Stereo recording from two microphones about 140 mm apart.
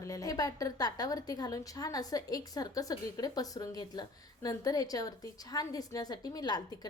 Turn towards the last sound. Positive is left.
turn(degrees=30)  # may be behind; listen again after turning